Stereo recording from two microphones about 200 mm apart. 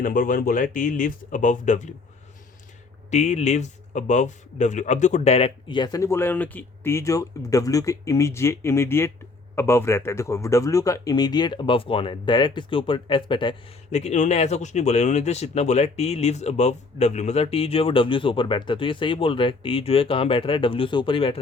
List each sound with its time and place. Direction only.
0.0 s speech: 45° left (ahead or behind)
3.1 s a man's voice: 35° left (ahead or behind)